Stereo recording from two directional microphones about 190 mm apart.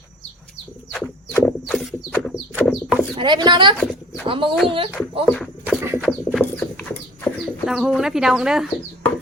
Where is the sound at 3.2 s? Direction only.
25° right (ahead or behind).